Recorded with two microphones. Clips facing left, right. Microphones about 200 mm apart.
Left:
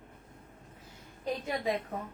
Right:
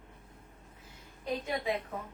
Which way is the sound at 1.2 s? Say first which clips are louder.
Left 1 dB; 35° left (ahead or behind).